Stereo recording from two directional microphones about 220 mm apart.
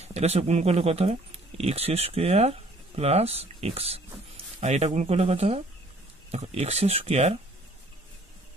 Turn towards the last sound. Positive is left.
turn(degrees=-30)  # may be behind; listen again after turning